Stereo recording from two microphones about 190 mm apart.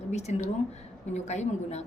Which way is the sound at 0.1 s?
35° left (ahead or behind).